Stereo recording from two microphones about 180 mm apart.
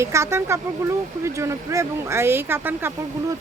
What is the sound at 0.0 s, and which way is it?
Speech, 15° right (ahead or behind).